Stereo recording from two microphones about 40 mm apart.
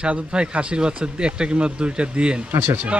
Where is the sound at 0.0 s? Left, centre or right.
Right.